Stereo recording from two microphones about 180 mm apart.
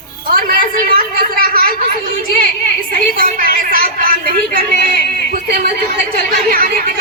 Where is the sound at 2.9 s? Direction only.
50° right (ahead or behind).